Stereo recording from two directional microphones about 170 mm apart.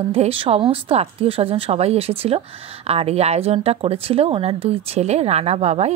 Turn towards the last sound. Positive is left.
turn(degrees=-40)  # may be behind; listen again after turning